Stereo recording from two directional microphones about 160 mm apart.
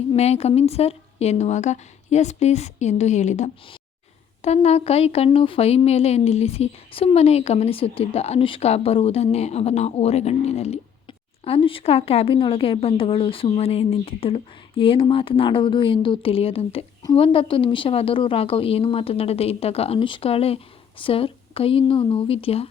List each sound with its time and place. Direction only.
0.2 s a woman's voice: 40° left (ahead or behind)
17.0 s a woman's voice: 25° left (ahead or behind)